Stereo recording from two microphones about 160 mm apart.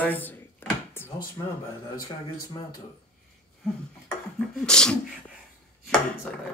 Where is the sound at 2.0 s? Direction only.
25° left (ahead or behind).